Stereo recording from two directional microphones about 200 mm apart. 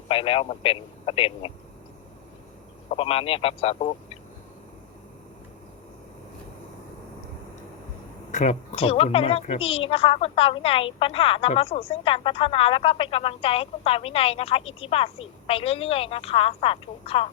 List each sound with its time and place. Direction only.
0.1 s speech: 30° left (ahead or behind)
2.9 s speech: 30° left (ahead or behind)
8.3 s speech: 40° left (ahead or behind)